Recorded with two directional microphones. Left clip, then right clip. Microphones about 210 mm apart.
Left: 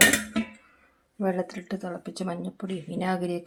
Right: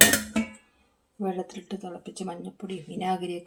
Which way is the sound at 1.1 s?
20° left (ahead or behind).